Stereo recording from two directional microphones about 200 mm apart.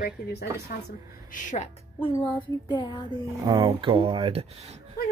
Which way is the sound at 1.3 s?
40° left (ahead or behind).